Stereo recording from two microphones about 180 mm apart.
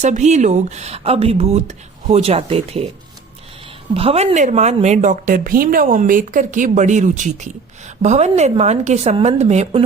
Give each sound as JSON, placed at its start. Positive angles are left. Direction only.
{"t": 0.0, "sound": "a woman's voice", "side_deg": -40}
{"t": 3.9, "sound": "a woman's voice", "side_deg": -35}